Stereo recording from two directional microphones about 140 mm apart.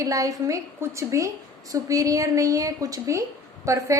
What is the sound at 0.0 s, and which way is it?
A woman's voice, 25° right (ahead or behind).